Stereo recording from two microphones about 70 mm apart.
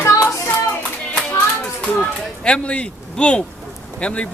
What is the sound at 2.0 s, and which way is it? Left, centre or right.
Speech, centre.